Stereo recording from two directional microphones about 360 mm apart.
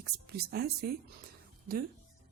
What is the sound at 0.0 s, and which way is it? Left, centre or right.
Speech, right.